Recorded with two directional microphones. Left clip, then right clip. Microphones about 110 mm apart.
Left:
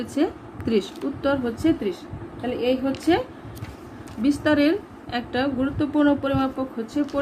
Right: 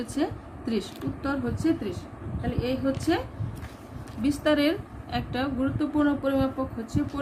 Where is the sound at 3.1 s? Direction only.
40° left (ahead or behind).